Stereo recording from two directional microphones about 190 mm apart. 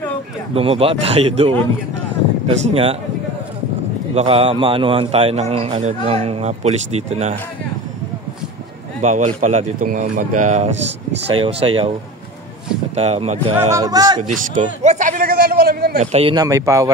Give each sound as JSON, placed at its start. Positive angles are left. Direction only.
{"t": 0.6, "sound": "a man's voice", "side_deg": -30}
{"t": 4.1, "sound": "a man's voice", "side_deg": -30}
{"t": 9.0, "sound": "a man's voice", "side_deg": -40}
{"t": 12.9, "sound": "a man's voice", "side_deg": -35}
{"t": 13.7, "sound": "speech", "side_deg": -20}
{"t": 14.2, "sound": "a sound", "side_deg": -40}
{"t": 16.0, "sound": "a man's voice", "side_deg": -35}
{"t": 16.3, "sound": "speech", "side_deg": -15}